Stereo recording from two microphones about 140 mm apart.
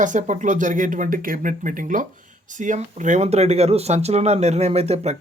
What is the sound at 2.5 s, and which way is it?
Speech, 65° right (ahead or behind).